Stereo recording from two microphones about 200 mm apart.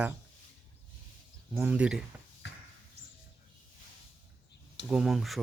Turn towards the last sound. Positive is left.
turn(degrees=0)  # may be behind; listen again after turning